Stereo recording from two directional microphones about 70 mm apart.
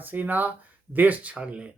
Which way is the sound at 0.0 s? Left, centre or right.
Right.